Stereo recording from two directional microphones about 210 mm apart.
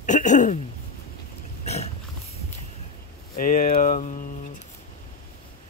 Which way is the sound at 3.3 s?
40° left (ahead or behind).